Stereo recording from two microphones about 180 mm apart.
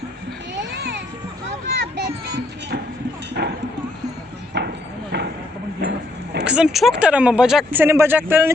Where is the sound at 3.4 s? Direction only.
70° right (ahead or behind).